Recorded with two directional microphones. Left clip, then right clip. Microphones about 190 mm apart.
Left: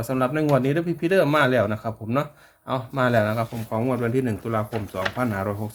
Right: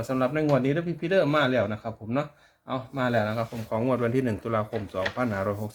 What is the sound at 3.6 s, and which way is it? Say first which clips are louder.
Speech: right 1 dB; 5° left (ahead or behind).